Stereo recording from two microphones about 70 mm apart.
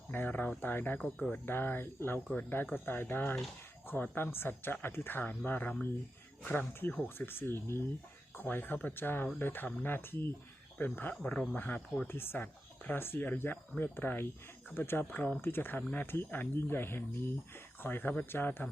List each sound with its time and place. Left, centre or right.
0.1 s speech: left
7.1 s speech: left
11.2 s speech: centre